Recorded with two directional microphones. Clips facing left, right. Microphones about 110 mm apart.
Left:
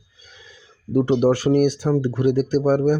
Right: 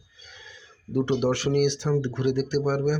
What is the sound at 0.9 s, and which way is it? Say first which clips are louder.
Speech: left 6 dB; 40° left (ahead or behind).